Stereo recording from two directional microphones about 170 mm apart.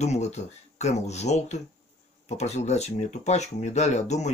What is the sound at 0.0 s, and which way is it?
Speech, 40° left (ahead or behind).